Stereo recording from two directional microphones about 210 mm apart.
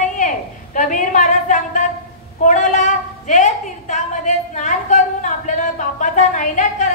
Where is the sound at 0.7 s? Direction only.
35° left (ahead or behind).